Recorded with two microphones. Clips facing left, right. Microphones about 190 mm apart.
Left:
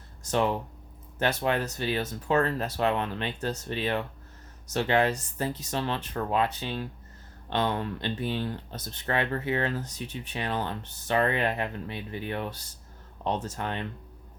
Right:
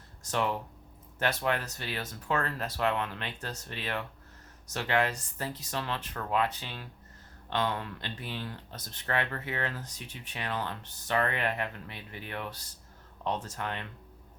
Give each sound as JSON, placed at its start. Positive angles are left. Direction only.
{"t": 0.3, "sound": "speech", "side_deg": 20}